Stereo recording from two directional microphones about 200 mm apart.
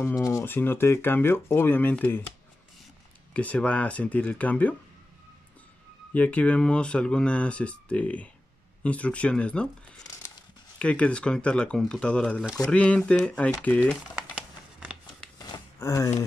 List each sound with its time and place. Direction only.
0.0 s speech: 15° left (ahead or behind)
3.3 s speech: 5° left (ahead or behind)
6.1 s speech: 5° left (ahead or behind)
10.8 s speech: 5° left (ahead or behind)
14.3 s a sound: 5° right (ahead or behind)
15.3 s a sound: 20° left (ahead or behind)